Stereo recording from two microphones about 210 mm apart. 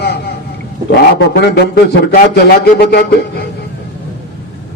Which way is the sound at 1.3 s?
50° left (ahead or behind).